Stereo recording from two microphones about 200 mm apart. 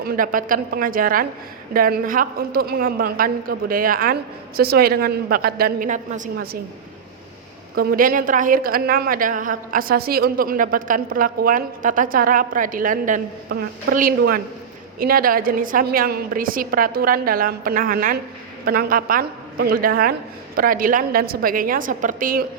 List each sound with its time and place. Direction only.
0.0 s a woman's voice: 45° right (ahead or behind)
7.8 s a woman's voice: 45° right (ahead or behind)